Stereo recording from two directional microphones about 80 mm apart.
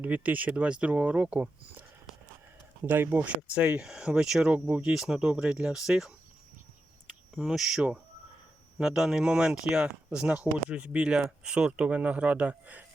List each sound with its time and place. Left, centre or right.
0.0 s speech: centre
2.8 s speech: right; by 6.1 s centre
7.3 s speech: centre